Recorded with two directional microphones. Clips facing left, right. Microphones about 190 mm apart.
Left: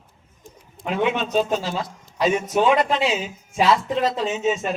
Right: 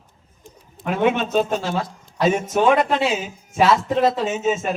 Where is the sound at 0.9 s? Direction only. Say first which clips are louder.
Right 3 dB; 50° right (ahead or behind).